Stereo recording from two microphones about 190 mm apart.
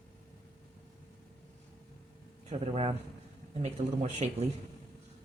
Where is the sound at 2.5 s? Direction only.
30° right (ahead or behind).